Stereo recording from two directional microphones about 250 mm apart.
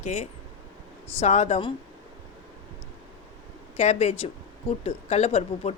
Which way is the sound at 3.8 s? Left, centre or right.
Left.